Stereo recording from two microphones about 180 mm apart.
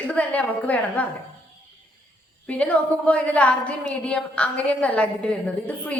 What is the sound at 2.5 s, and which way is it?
Speech, 5° left (ahead or behind).